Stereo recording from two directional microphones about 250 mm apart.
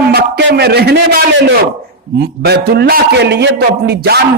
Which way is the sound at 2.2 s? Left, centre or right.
Right.